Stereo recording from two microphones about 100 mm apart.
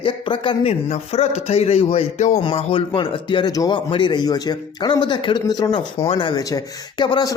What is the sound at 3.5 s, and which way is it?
Speech, 40° left (ahead or behind).